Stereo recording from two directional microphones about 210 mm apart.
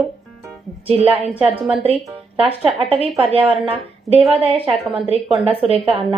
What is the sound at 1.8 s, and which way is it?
Speech, 25° right (ahead or behind).